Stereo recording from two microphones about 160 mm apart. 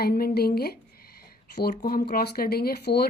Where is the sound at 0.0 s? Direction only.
70° left (ahead or behind).